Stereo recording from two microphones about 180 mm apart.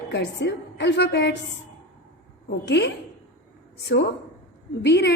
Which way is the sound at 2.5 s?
70° left (ahead or behind).